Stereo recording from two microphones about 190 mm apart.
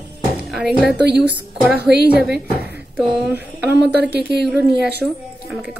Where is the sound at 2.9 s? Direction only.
10° right (ahead or behind).